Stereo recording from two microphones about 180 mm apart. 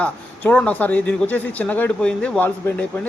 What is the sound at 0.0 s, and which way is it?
Speech, 5° left (ahead or behind).